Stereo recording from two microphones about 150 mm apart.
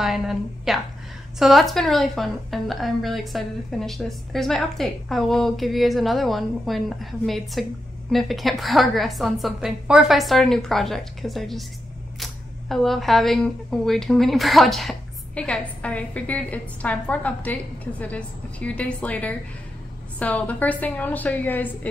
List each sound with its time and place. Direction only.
0.0 s a woman's voice: centre (ahead or behind)